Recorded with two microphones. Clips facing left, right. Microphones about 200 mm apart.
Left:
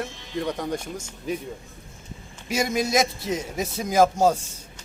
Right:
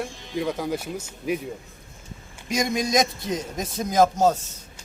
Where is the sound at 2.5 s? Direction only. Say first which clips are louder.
Even; 5° left (ahead or behind).